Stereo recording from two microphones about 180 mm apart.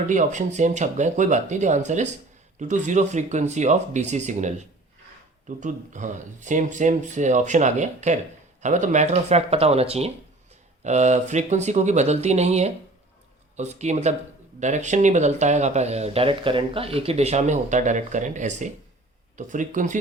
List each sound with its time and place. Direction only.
0.1 s speech: 45° right (ahead or behind)